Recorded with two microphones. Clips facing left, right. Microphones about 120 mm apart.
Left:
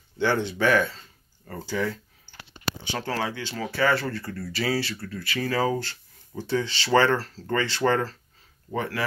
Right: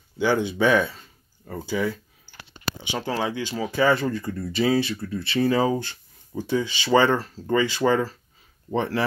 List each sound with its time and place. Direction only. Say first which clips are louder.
0.2 s speech: right 2 dB; 10° right (ahead or behind)
8.7 s speech: right 5 dB; 30° right (ahead or behind)